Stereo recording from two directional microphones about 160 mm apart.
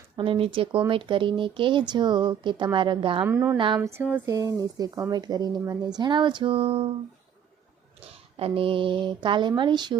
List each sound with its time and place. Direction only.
0.2 s a woman's voice: 35° right (ahead or behind)
3.2 s a woman's voice: 15° right (ahead or behind); by 6.9 s 35° right (ahead or behind)
8.0 s speech: 35° right (ahead or behind)